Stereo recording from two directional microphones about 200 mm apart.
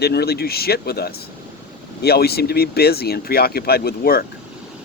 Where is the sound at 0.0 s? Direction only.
55° left (ahead or behind).